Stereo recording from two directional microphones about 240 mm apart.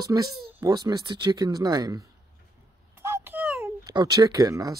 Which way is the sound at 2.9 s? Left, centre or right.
Centre.